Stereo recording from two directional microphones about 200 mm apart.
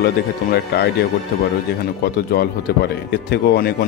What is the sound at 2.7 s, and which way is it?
Speech, 55° left (ahead or behind).